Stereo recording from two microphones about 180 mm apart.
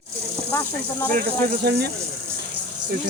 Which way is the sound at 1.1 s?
60° right (ahead or behind).